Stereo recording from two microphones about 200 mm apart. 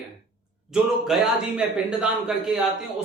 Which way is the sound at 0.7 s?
Centre (ahead or behind).